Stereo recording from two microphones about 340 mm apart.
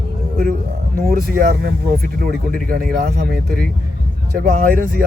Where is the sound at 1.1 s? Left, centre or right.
Right.